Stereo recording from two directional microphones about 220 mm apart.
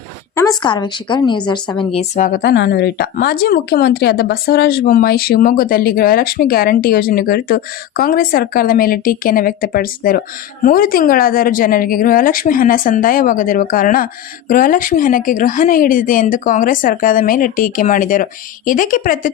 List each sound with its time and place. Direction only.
0.3 s a woman's voice: 20° left (ahead or behind); by 19.3 s 40° left (ahead or behind)